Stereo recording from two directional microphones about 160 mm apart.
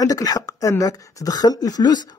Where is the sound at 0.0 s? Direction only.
25° left (ahead or behind).